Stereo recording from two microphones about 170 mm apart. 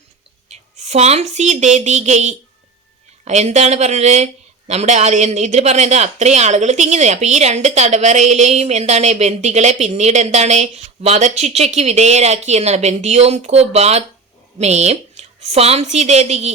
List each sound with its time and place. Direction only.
0.4 s speech: 40° right (ahead or behind)